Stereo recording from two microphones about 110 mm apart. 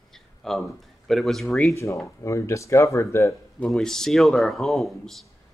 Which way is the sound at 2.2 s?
25° left (ahead or behind).